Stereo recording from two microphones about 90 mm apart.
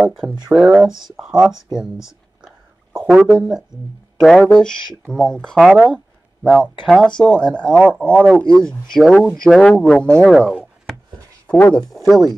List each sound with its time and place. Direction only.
0.0 s speech: centre (ahead or behind)
0.3 s speech: 15° right (ahead or behind)
0.8 s speech: 5° right (ahead or behind)
1.8 s a sound: 5° right (ahead or behind)
4.2 s speech: 5° left (ahead or behind)
5.6 s speech: 5° right (ahead or behind)
6.4 s speech: 5° left (ahead or behind)
10.5 s a sound: 5° right (ahead or behind)